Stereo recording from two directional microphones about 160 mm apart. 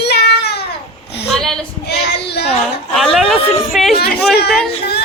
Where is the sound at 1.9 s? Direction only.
90° left.